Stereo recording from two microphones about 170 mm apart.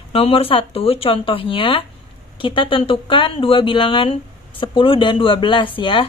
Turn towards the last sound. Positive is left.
turn(degrees=30)  # may be behind; listen again after turning